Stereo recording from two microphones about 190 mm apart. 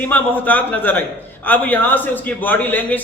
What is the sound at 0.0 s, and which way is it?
A man's voice, 10° left (ahead or behind).